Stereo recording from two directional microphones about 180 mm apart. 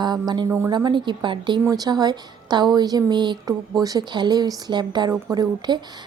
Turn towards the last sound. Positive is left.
turn(degrees=-25)  # may be behind; listen again after turning